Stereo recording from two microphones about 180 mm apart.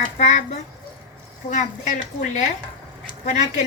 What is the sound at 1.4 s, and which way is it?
A woman's voice, 45° left (ahead or behind).